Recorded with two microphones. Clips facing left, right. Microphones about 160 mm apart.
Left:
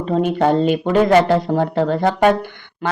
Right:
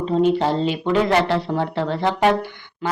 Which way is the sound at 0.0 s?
55° left (ahead or behind).